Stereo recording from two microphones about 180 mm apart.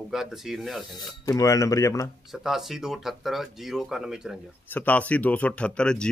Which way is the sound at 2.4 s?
Centre (ahead or behind).